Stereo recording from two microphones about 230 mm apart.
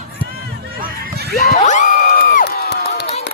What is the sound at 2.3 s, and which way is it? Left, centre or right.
Crowd, left.